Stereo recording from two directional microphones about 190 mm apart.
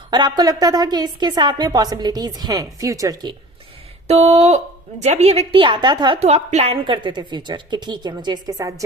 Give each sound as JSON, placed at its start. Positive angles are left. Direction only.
{"t": 0.1, "sound": "a woman's voice", "side_deg": -20}
{"t": 4.0, "sound": "a woman's voice", "side_deg": -35}